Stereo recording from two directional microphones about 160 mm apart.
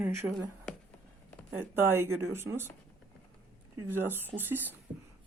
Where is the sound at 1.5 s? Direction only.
15° right (ahead or behind).